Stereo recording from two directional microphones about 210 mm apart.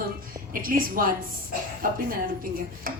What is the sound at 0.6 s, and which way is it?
A woman's voice, 40° right (ahead or behind).